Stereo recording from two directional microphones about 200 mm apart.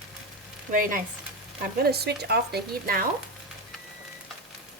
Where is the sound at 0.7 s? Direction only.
45° right (ahead or behind).